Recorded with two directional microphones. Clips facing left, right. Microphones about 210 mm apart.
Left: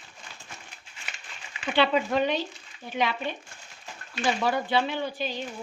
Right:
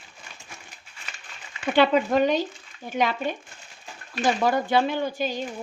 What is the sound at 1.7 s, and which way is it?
Speech, 45° right (ahead or behind).